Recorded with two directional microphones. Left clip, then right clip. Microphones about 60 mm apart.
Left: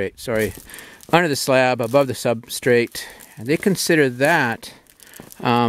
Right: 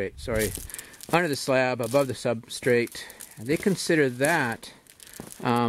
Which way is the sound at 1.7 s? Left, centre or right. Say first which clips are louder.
Left 7 dB; left.